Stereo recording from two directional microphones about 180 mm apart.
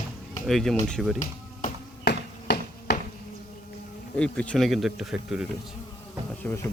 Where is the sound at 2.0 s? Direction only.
65° left (ahead or behind).